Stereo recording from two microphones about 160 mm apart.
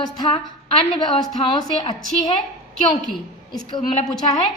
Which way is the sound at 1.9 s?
25° left (ahead or behind).